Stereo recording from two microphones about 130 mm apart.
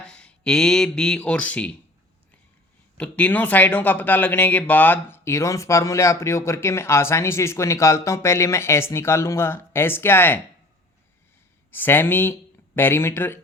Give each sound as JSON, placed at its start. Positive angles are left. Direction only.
{"t": 0.0, "sound": "speech", "side_deg": 10}
{"t": 3.0, "sound": "speech", "side_deg": 10}
{"t": 11.7, "sound": "speech", "side_deg": 15}